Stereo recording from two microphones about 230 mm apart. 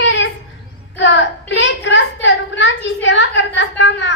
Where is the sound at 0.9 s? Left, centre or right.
Left.